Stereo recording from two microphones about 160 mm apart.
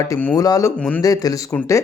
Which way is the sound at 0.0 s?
20° left (ahead or behind).